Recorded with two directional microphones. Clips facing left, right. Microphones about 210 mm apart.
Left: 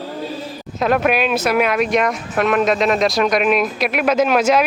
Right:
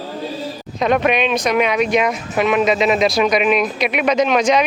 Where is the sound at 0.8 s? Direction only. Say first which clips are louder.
Even; 5° left (ahead or behind).